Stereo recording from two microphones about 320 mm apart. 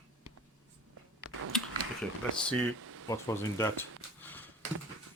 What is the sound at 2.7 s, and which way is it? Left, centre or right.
Air conditioning, right.